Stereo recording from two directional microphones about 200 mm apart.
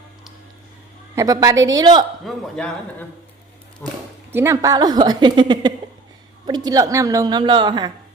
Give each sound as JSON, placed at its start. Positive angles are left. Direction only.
{"t": 1.1, "sound": "a woman's voice", "side_deg": -15}
{"t": 2.2, "sound": "speech", "side_deg": 5}
{"t": 4.3, "sound": "a woman's voice", "side_deg": -10}